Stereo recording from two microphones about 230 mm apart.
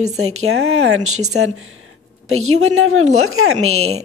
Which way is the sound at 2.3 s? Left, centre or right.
Right.